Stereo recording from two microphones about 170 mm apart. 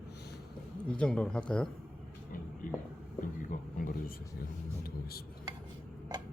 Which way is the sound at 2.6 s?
55° left (ahead or behind).